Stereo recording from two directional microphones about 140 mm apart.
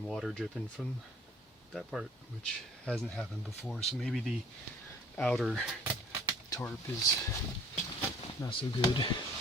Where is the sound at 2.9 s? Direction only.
5° left (ahead or behind).